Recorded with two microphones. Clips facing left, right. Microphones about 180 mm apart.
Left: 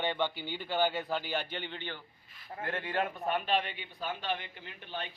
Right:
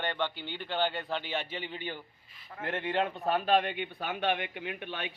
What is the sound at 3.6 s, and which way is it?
A man's voice, 55° right (ahead or behind).